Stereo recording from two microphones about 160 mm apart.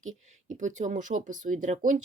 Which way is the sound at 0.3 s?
50° right (ahead or behind).